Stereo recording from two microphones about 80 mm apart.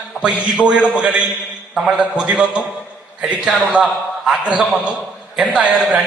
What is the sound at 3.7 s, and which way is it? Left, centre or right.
A man's voice, centre.